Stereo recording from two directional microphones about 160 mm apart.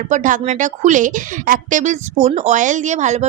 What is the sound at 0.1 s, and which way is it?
Speech, 50° right (ahead or behind).